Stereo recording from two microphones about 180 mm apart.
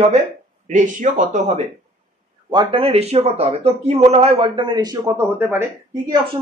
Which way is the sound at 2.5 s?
25° right (ahead or behind).